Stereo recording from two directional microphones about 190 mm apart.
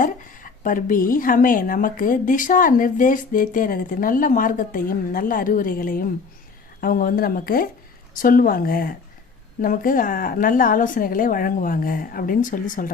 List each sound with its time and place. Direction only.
0.0 s speech: 45° left (ahead or behind)